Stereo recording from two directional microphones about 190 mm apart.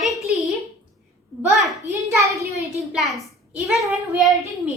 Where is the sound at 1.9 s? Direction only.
15° right (ahead or behind).